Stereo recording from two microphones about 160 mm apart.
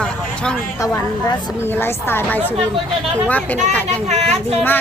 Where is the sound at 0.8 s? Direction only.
20° left (ahead or behind).